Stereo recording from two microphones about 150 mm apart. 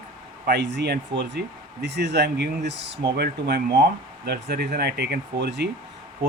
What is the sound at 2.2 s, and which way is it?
Speech, 90° right.